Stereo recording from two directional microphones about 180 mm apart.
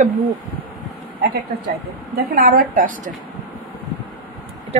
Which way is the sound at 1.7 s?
55° right (ahead or behind).